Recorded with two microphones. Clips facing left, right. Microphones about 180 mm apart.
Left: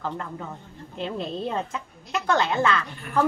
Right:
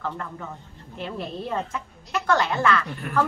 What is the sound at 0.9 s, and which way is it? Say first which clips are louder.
Speech: left 2 dB; 20° left (ahead or behind).